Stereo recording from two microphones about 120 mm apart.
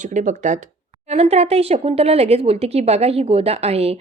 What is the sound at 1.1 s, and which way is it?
A woman's voice, 60° right (ahead or behind).